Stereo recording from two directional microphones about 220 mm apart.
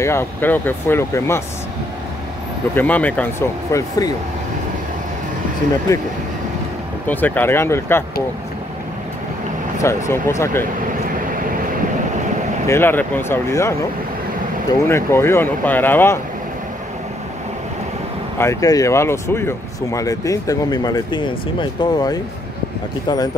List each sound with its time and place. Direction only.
0.0 s speech: 10° left (ahead or behind)
2.7 s speech: 10° left (ahead or behind)
7.1 s speech: 10° left (ahead or behind)
9.8 s speech: 10° left (ahead or behind)
12.6 s speech: 10° left (ahead or behind)
18.4 s speech: 15° left (ahead or behind)